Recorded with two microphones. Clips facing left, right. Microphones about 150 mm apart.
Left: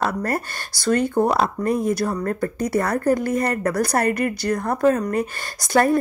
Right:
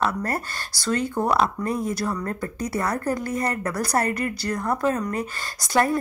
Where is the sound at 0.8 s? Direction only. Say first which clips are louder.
Left 6 dB; 55° left (ahead or behind).